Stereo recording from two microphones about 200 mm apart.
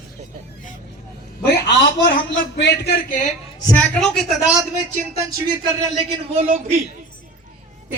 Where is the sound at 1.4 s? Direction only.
60° left (ahead or behind); by 3.3 s 40° left (ahead or behind).